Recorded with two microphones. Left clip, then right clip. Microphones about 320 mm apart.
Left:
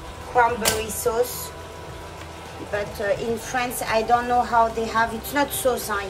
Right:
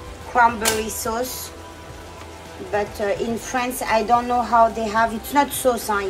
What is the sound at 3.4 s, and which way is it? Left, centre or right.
A woman's voice, right.